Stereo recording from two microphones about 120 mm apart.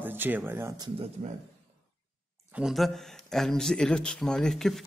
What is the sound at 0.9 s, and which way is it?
Speech, 55° right (ahead or behind).